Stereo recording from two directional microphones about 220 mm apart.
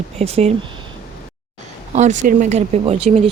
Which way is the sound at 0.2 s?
30° right (ahead or behind).